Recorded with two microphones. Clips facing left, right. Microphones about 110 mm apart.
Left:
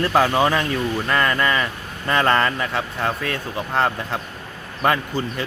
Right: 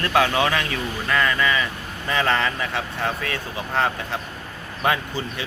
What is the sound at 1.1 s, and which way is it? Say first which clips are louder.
A man's voice: even; 45° left (ahead or behind).